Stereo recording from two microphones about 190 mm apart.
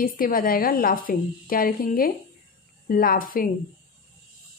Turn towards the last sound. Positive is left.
turn(degrees=50)  # may be behind; listen again after turning